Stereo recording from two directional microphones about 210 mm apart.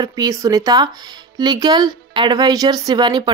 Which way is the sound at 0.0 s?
15° right (ahead or behind).